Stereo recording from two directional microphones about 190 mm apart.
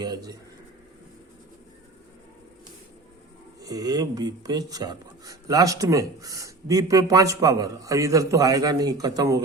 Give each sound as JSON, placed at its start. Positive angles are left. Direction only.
{"t": 0.0, "sound": "speech", "side_deg": -20}
{"t": 3.6, "sound": "speech", "side_deg": -20}